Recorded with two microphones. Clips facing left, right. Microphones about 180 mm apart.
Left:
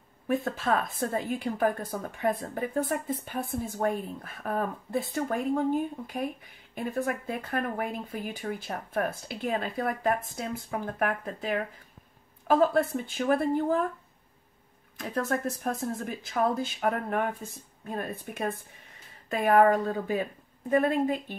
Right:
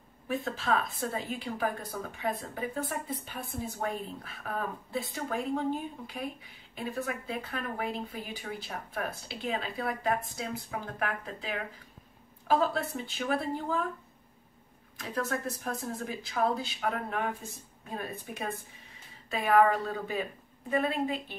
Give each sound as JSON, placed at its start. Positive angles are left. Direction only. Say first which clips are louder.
{"t": 0.3, "sound": "a woman's voice", "louder": "left 3 dB", "side_deg": 50}
{"t": 15.0, "sound": "a woman's voice", "louder": "left 4 dB", "side_deg": 50}